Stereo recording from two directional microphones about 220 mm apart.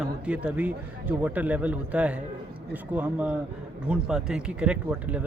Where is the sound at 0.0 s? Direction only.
5° right (ahead or behind).